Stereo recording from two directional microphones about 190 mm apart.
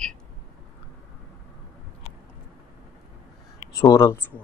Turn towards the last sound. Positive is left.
turn(degrees=15)  # may be behind; listen again after turning